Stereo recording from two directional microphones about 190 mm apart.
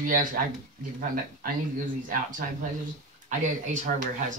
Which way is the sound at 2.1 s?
45° right (ahead or behind).